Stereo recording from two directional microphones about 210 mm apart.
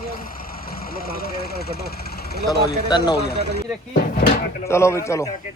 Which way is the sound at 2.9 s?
20° left (ahead or behind).